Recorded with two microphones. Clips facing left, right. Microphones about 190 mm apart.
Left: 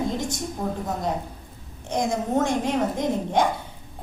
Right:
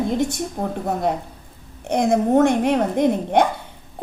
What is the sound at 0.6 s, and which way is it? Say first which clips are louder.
Speech: right 2 dB; 50° right (ahead or behind).